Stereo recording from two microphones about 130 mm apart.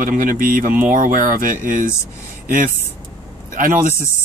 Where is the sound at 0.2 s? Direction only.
90° right.